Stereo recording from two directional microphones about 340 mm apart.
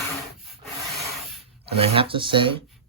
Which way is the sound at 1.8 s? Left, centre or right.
Centre.